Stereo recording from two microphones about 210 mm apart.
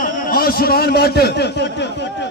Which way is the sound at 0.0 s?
45° left (ahead or behind).